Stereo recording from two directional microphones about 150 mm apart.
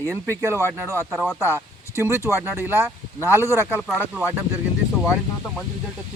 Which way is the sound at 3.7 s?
5° right (ahead or behind).